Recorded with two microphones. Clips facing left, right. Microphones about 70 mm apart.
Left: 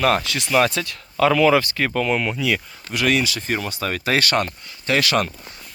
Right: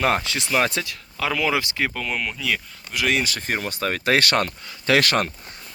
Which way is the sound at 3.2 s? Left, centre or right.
Right.